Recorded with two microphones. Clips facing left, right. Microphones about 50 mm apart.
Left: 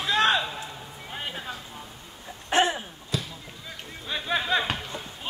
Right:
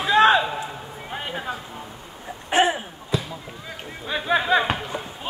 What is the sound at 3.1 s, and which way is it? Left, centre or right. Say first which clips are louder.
Basketball bounce: right 5 dB; centre.